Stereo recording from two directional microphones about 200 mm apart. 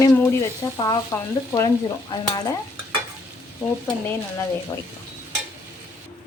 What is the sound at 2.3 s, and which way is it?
Speech, 20° left (ahead or behind).